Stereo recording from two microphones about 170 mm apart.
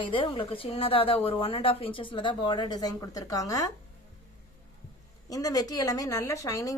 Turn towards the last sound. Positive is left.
turn(degrees=20)  # may be behind; listen again after turning